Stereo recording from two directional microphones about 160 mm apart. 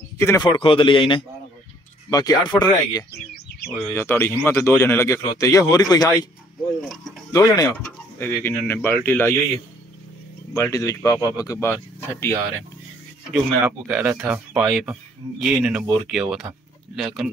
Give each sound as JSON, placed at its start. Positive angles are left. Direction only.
{"t": 0.2, "sound": "speech", "side_deg": 15}
{"t": 0.5, "sound": "speech", "side_deg": 30}
{"t": 3.7, "sound": "speech", "side_deg": 15}
{"t": 6.8, "sound": "speech", "side_deg": 0}
{"t": 7.3, "sound": "speech", "side_deg": 25}
{"t": 8.2, "sound": "speech", "side_deg": 15}
{"t": 10.5, "sound": "speech", "side_deg": 20}
{"t": 13.3, "sound": "speech", "side_deg": -10}